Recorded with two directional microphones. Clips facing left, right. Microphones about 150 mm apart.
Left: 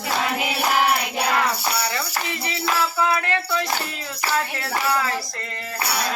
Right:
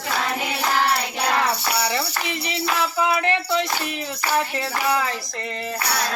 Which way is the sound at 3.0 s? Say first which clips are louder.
Right 1 dB; 20° right (ahead or behind).